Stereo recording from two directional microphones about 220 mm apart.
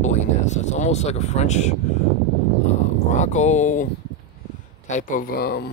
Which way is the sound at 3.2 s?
30° left (ahead or behind).